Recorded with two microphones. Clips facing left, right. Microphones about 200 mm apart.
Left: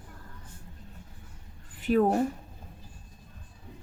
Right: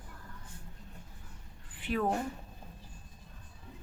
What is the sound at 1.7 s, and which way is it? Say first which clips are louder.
Speech: left 8 dB; 40° left (ahead or behind).